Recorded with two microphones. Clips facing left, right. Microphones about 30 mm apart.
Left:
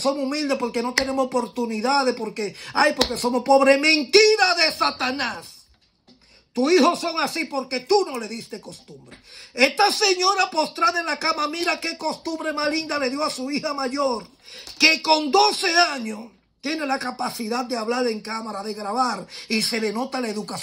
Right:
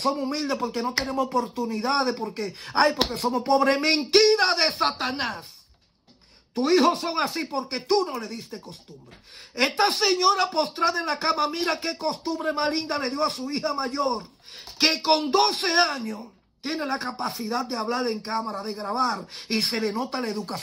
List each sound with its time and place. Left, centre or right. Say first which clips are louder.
0.0 s speech: left 3 dB; left
2.8 s speech: left 2 dB; left
3.3 s speech: left 6 dB; left
6.5 s speech: left 3 dB; left
14.8 s speech: left 4 dB; left
17.2 s speech: left 2 dB; left